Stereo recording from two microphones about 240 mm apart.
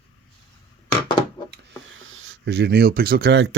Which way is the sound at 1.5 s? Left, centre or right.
Right.